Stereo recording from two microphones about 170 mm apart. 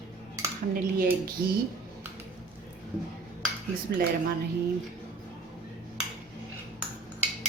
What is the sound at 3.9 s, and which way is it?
Speech, 70° right (ahead or behind).